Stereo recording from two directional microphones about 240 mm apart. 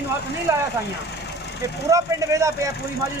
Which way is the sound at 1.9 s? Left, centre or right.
Centre.